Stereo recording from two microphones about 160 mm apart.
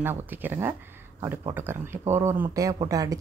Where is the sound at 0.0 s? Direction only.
10° right (ahead or behind).